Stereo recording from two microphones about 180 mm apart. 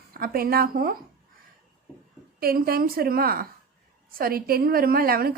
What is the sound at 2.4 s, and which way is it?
A woman's voice, 55° right (ahead or behind).